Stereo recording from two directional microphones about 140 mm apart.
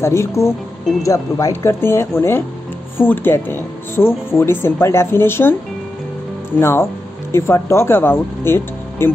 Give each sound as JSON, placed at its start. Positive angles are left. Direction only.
{"t": 0.0, "sound": "speech", "side_deg": 20}
{"t": 6.6, "sound": "speech", "side_deg": 20}